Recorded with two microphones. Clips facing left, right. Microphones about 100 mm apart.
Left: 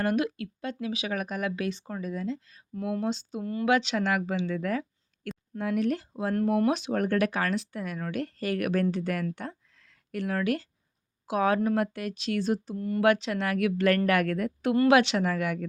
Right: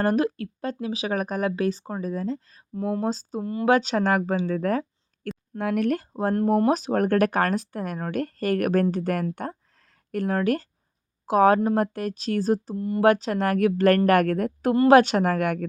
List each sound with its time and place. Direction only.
0.0 s speech: 40° right (ahead or behind)
5.5 s speech: 60° right (ahead or behind)
6.3 s speech: 30° right (ahead or behind)
12.7 s speech: 25° right (ahead or behind)
13.1 s speech: 40° right (ahead or behind)